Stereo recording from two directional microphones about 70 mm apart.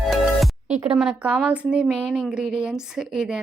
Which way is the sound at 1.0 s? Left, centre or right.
Centre.